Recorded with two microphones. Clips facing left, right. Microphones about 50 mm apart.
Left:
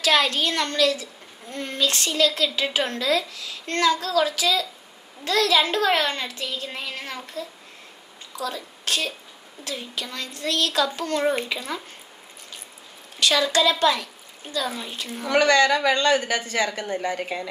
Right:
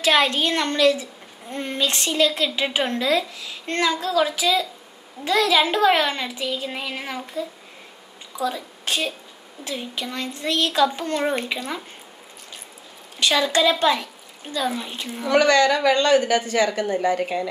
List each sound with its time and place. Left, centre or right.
0.0 s a woman's voice: right
13.2 s a woman's voice: centre
14.7 s a child's voice: centre
15.0 s a woman's voice: centre
15.3 s a woman's voice: left
15.9 s a woman's voice: right